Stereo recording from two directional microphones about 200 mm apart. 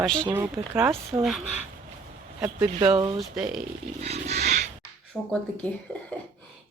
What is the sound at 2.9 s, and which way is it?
Speech, 25° right (ahead or behind).